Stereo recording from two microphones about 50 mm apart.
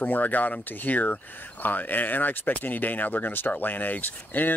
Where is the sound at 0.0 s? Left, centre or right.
Left.